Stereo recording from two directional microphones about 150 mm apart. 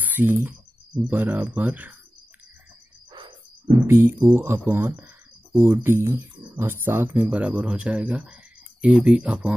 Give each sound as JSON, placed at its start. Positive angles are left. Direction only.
{"t": 0.0, "sound": "typing", "side_deg": -10}
{"t": 1.0, "sound": "speech", "side_deg": -15}
{"t": 3.1, "sound": "cricket", "side_deg": -35}
{"t": 3.8, "sound": "speech", "side_deg": -15}